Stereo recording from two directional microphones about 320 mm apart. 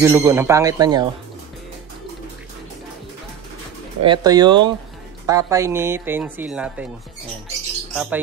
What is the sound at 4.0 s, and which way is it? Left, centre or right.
Speech, centre.